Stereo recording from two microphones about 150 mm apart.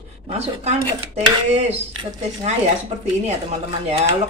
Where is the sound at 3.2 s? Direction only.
45° right (ahead or behind).